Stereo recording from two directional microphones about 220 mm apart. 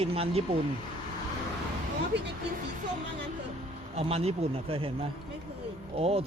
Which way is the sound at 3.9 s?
25° right (ahead or behind).